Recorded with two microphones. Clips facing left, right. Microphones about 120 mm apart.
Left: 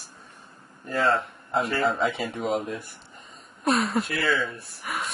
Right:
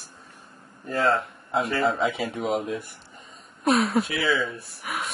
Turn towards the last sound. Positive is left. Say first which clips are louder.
# even
turn(degrees=0)  # may be behind; listen again after turning